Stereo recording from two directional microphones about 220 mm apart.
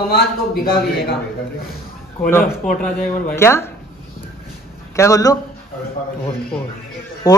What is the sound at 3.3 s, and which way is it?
Speech, 10° left (ahead or behind).